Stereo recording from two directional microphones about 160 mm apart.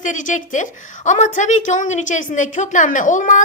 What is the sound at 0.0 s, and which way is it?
A woman's voice, 50° left (ahead or behind).